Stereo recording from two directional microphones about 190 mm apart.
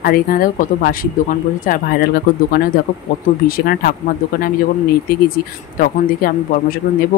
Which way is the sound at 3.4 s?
50° left (ahead or behind).